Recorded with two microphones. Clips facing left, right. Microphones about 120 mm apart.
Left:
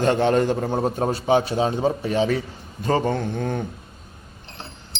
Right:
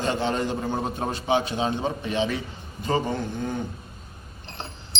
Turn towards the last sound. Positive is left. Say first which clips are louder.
# left 4 dB
turn(degrees=55)  # may be behind; listen again after turning